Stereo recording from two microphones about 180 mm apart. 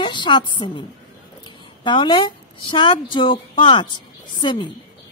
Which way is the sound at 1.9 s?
25° left (ahead or behind).